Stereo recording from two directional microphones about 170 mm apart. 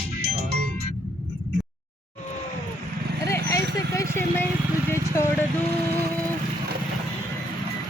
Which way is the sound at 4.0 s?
15° left (ahead or behind).